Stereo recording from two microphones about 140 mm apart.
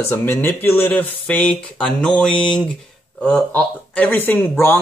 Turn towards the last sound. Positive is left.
turn(degrees=15)  # may be behind; listen again after turning